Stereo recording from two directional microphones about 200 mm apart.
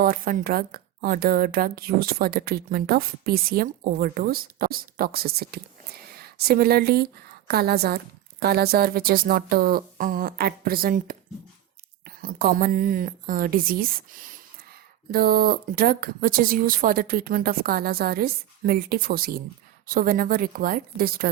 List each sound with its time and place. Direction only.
0.0 s a woman's voice: 45° right (ahead or behind)
15.1 s a woman's voice: 50° right (ahead or behind)